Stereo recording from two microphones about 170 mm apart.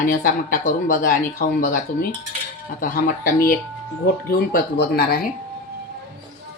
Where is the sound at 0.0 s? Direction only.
55° left (ahead or behind).